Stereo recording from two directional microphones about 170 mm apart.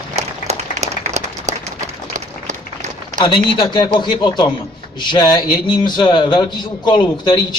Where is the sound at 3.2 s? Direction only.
30° left (ahead or behind).